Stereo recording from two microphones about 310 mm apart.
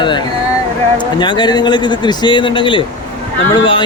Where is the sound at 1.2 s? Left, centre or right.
Centre.